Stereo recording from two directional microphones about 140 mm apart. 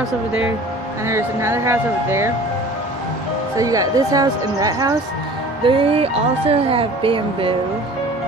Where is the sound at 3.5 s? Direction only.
25° right (ahead or behind).